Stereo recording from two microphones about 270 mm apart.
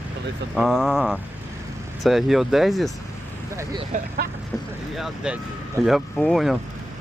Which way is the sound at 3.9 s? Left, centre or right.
Right.